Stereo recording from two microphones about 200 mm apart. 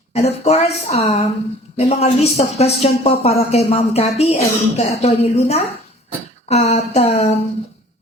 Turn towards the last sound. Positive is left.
turn(degrees=30)  # may be behind; listen again after turning